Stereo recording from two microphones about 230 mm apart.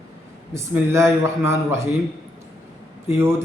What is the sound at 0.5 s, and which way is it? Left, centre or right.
A man's voice, centre.